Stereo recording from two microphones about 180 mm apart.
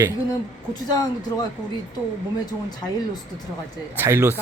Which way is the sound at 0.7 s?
20° left (ahead or behind).